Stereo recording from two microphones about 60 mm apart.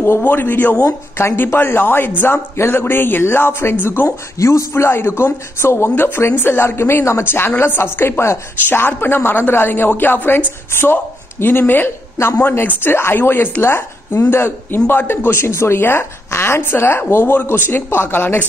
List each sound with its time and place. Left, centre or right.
0.2 s a woman's voice: left
2.5 s a woman's voice: left
4.4 s a woman's voice: left